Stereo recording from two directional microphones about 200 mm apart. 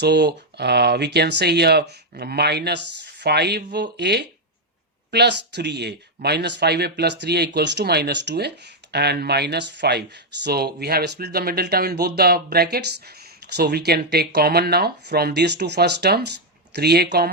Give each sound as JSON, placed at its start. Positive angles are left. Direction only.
{"t": 0.0, "sound": "speech", "side_deg": -60}